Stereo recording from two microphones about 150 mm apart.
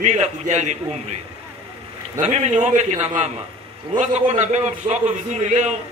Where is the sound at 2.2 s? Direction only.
50° right (ahead or behind).